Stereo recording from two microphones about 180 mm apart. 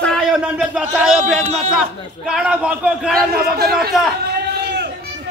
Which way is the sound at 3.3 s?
60° right (ahead or behind).